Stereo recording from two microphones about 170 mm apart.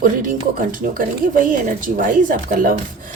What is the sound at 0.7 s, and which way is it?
Speech, 50° right (ahead or behind).